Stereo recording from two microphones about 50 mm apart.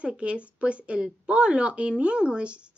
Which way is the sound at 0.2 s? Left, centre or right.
Right.